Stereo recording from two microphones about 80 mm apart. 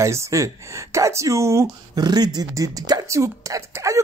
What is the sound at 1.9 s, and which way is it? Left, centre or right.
Speech, right.